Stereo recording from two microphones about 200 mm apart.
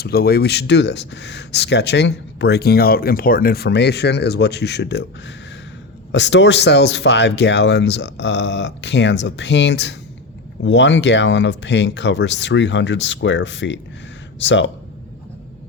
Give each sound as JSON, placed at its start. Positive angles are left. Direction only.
{"t": 0.0, "sound": "speech", "side_deg": 50}
{"t": 6.1, "sound": "speech", "side_deg": 65}